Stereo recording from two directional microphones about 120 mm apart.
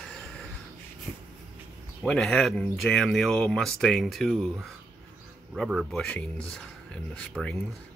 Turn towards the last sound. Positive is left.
turn(degrees=10)  # may be behind; listen again after turning